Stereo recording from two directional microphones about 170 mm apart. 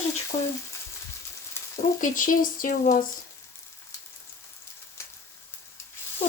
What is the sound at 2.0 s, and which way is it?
Speech, 50° left (ahead or behind).